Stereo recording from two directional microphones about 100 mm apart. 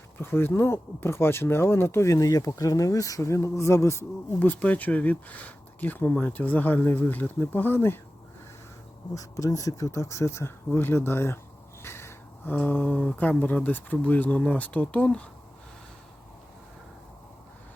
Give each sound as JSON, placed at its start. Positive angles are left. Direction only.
{"t": 0.2, "sound": "speech", "side_deg": 20}
{"t": 4.4, "sound": "speech", "side_deg": 15}
{"t": 9.1, "sound": "speech", "side_deg": 35}
{"t": 11.8, "sound": "a sound", "side_deg": 25}
{"t": 12.5, "sound": "speech", "side_deg": 15}